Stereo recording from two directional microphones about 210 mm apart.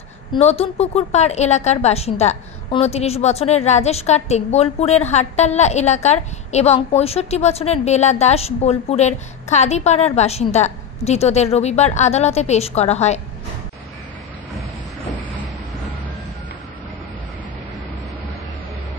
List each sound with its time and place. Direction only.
0.3 s a woman's voice: 30° left (ahead or behind)